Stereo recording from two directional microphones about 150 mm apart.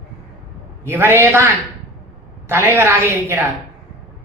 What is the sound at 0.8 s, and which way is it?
Speech, 15° right (ahead or behind).